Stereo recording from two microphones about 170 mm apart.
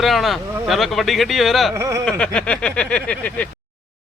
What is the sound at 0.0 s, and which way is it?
Speech, centre (ahead or behind).